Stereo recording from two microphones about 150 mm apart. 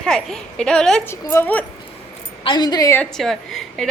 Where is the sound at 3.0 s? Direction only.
Centre (ahead or behind).